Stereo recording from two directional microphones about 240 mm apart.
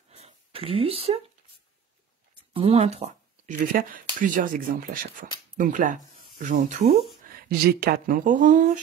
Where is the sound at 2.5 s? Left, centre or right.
Right.